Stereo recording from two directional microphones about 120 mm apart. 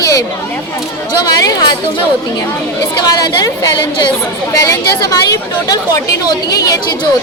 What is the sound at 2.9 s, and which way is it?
A woman's voice, 35° left (ahead or behind).